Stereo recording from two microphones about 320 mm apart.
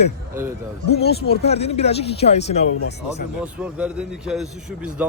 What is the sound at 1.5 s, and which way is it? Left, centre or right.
Speech, centre.